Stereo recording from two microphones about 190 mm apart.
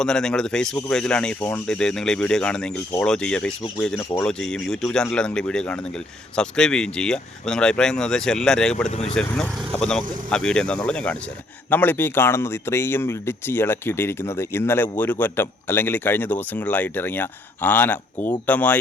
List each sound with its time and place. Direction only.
0.0 s speech: 5° left (ahead or behind)
8.9 s speech: 35° left (ahead or behind)
9.1 s speech: 5° left (ahead or behind)